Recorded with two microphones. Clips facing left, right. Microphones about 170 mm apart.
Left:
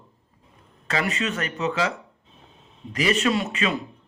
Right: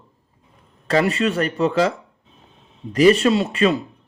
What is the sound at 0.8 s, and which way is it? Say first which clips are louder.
Speech: right 8 dB; 35° right (ahead or behind).